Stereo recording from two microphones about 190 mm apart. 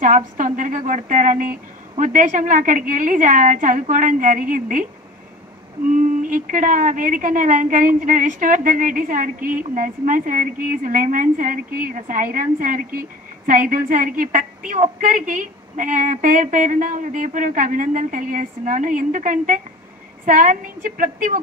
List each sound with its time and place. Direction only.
0.0 s a woman's voice: 45° right (ahead or behind)
5.9 s a woman's voice: 45° right (ahead or behind)